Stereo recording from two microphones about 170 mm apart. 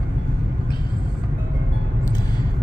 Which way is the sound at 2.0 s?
25° left (ahead or behind).